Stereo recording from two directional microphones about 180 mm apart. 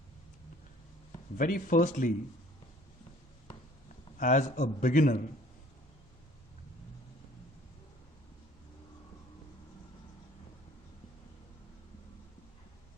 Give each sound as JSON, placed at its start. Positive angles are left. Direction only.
{"t": 1.4, "sound": "a man's voice", "side_deg": 50}
{"t": 4.2, "sound": "a man's voice", "side_deg": 45}